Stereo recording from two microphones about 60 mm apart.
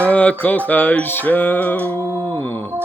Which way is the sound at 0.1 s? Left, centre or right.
Left.